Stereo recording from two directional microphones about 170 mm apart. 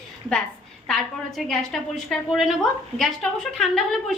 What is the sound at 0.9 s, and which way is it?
A woman's voice, centre (ahead or behind).